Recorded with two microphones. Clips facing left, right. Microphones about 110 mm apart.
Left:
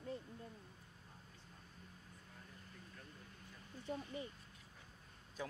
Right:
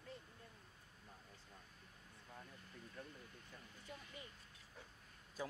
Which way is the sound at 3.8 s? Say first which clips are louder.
Left 11 dB; 30° left (ahead or behind).